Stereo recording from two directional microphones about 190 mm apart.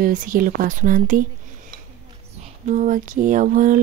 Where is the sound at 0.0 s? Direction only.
45° right (ahead or behind).